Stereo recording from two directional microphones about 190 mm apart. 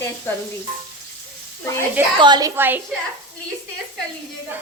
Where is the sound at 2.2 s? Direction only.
20° right (ahead or behind).